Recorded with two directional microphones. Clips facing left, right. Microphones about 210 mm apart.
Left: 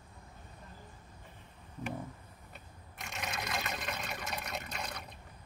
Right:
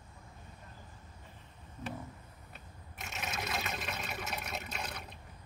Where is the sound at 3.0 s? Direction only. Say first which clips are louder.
Even; 5° right (ahead or behind).